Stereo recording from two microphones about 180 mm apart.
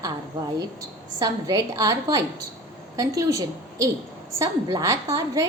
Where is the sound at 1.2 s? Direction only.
20° right (ahead or behind).